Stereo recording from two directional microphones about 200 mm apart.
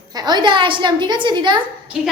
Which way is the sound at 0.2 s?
20° right (ahead or behind).